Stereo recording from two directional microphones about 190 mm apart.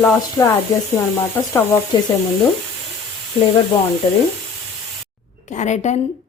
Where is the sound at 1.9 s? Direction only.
20° left (ahead or behind).